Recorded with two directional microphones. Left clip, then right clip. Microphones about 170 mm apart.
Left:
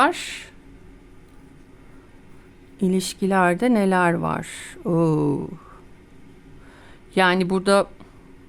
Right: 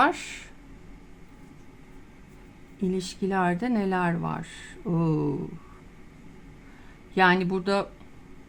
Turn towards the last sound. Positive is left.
turn(degrees=55)  # may be behind; listen again after turning